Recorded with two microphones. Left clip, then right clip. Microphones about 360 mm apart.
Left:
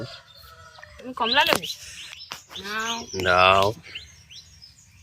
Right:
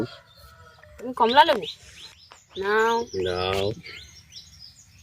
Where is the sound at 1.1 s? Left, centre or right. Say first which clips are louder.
Right 4 dB; centre.